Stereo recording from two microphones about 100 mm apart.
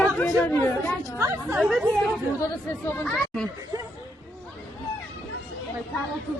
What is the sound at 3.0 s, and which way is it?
Speech, 5° left (ahead or behind).